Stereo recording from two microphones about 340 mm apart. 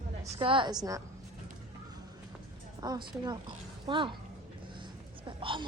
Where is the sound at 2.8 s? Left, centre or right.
Centre.